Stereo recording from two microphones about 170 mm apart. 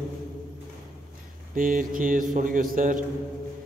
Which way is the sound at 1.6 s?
55° right (ahead or behind).